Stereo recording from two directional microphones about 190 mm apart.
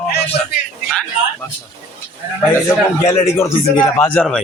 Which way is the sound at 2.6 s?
15° left (ahead or behind).